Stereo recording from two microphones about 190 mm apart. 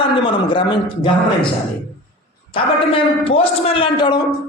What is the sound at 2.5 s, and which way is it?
A man's voice, 30° left (ahead or behind).